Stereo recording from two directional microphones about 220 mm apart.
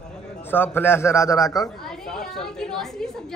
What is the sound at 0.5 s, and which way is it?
A woman's voice, 10° left (ahead or behind).